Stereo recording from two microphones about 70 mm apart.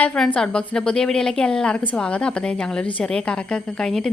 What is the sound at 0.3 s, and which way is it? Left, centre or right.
A woman's voice, centre.